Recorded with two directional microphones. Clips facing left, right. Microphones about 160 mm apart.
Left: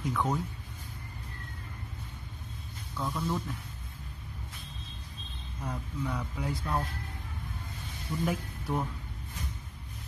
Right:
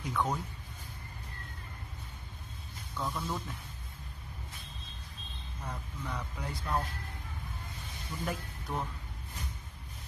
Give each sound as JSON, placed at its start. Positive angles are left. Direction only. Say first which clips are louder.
{"t": 0.0, "sound": "speech", "louder": "left 2 dB", "side_deg": 0}
{"t": 3.0, "sound": "speech", "louder": "left 3 dB", "side_deg": 0}
{"t": 5.6, "sound": "speech", "louder": "left 6 dB", "side_deg": 5}
{"t": 8.3, "sound": "speech", "louder": "left 3 dB", "side_deg": 10}